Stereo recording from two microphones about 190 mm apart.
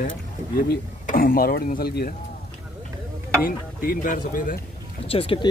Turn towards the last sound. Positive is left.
turn(degrees=30)  # may be behind; listen again after turning